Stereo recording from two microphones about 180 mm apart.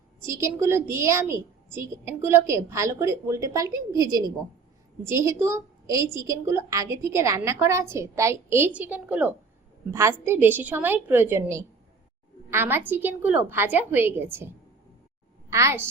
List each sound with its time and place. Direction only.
0.2 s a woman's voice: 15° right (ahead or behind)